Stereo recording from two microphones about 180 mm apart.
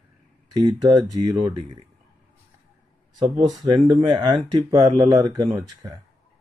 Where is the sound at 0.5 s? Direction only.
20° right (ahead or behind).